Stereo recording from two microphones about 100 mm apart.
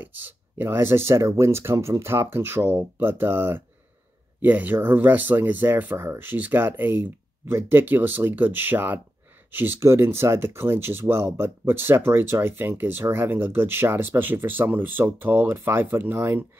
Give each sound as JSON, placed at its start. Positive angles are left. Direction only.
{"t": 0.0, "sound": "speech", "side_deg": -20}